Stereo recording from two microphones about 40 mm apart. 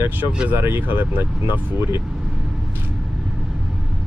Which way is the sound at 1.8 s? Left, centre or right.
Right.